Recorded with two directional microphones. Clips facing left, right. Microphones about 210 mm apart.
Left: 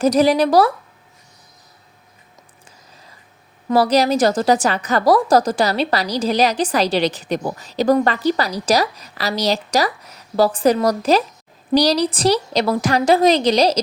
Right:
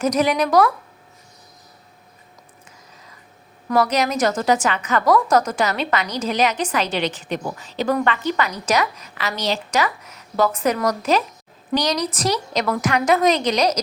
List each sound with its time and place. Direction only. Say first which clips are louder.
0.0 s a woman's voice: left 5 dB; 35° left (ahead or behind)
3.7 s a woman's voice: left 4 dB; 35° left (ahead or behind)